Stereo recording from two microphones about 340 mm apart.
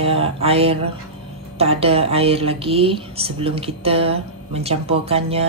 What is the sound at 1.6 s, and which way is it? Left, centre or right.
Speech, centre.